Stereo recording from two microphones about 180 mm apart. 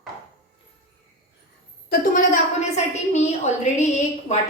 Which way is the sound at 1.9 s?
45° left (ahead or behind).